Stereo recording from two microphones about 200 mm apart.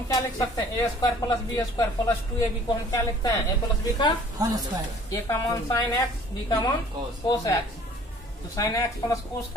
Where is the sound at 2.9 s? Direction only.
15° left (ahead or behind).